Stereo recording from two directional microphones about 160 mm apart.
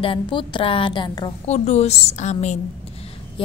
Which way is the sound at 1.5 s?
45° left (ahead or behind).